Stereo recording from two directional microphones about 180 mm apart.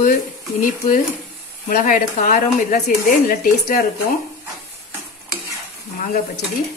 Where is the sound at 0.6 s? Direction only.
45° left (ahead or behind).